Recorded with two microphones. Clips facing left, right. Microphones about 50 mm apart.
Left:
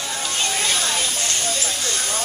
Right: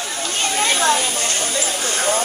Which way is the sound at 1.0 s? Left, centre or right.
Right.